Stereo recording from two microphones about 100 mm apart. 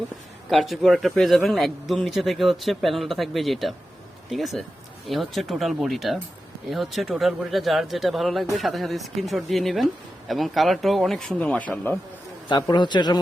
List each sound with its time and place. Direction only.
0.5 s speech: centre (ahead or behind)
11.3 s speech: 15° left (ahead or behind)
12.5 s a man's voice: 45° left (ahead or behind)